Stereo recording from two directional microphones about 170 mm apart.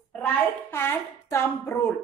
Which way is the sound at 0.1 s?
10° left (ahead or behind).